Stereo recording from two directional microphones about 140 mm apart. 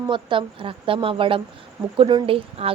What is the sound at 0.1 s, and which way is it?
A woman's voice, 35° right (ahead or behind).